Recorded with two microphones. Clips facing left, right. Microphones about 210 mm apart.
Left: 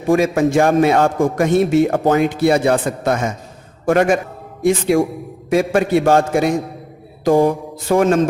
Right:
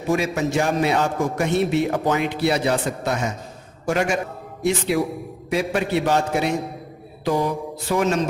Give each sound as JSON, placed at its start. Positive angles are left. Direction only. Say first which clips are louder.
{"t": 0.1, "sound": "a man's voice", "louder": "left 7 dB", "side_deg": 50}